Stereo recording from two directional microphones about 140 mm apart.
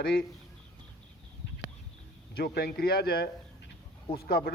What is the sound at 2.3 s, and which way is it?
Speech, 90° left.